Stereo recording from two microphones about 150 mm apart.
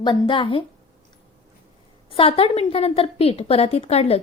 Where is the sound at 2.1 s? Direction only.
40° left (ahead or behind).